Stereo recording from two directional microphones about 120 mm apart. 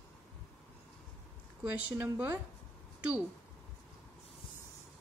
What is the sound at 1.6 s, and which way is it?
Speech, 10° right (ahead or behind).